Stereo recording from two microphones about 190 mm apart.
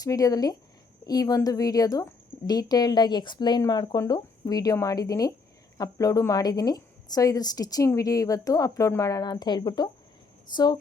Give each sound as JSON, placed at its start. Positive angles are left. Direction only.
{"t": 0.0, "sound": "a woman's voice", "side_deg": 20}